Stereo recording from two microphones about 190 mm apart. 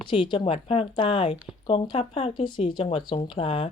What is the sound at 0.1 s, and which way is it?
Speech, 25° left (ahead or behind).